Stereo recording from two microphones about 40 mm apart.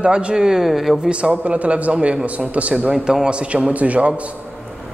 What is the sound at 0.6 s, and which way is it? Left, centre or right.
Speech, centre.